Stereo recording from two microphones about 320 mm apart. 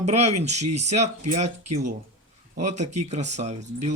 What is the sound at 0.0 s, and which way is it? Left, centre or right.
Speech, centre.